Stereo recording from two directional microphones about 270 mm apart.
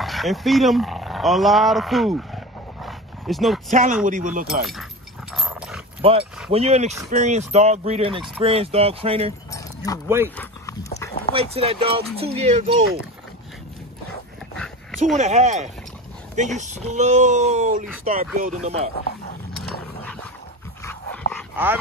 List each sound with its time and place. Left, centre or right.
0.0 s roaring cats: centre
3.7 s speech: right
5.3 s dog: centre
6.0 s speech: right
10.0 s speech: centre
10.3 s dog: centre
11.3 s speech: right
14.5 s dog: centre
15.1 s speech: right
20.8 s dog: centre